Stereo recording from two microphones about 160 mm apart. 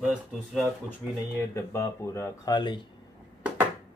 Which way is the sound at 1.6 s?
15° left (ahead or behind).